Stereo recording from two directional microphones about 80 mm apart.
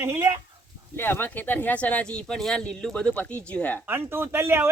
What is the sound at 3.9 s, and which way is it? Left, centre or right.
Speech, right.